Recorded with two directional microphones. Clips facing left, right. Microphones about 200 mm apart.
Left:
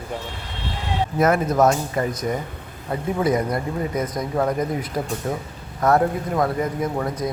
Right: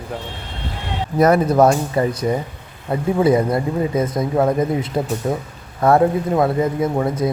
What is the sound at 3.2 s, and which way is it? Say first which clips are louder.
A man's voice: right 6 dB; 30° right (ahead or behind).